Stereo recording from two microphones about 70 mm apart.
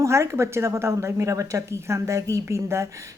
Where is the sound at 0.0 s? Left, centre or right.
Right.